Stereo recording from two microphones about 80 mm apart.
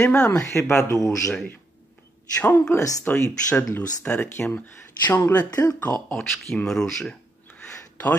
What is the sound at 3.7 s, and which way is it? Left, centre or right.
Speech, centre.